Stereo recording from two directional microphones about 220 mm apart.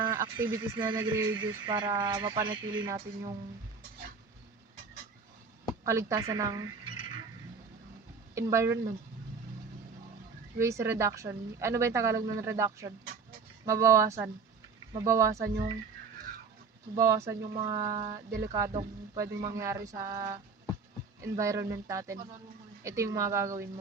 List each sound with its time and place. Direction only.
0.0 s radio: 10° right (ahead or behind)
0.4 s speech: 15° right (ahead or behind)
5.8 s speech: 15° right (ahead or behind)
8.4 s speech: 15° right (ahead or behind)
10.6 s speech: 15° right (ahead or behind)
16.9 s speech: 15° right (ahead or behind)